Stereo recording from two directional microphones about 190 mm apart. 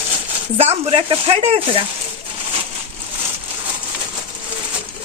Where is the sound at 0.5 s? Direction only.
30° right (ahead or behind).